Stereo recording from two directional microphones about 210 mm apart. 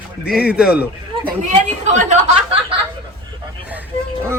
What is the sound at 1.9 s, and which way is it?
Speech, 35° right (ahead or behind).